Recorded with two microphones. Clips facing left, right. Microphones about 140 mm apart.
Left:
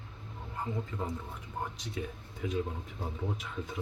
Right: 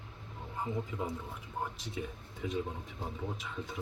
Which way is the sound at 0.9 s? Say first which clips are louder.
Even; 15° right (ahead or behind).